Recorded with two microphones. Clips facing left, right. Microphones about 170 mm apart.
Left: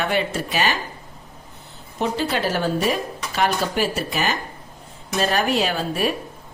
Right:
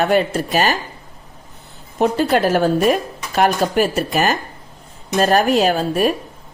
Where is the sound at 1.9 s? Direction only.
50° right (ahead or behind).